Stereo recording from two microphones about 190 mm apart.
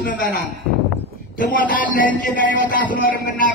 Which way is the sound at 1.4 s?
45° left (ahead or behind).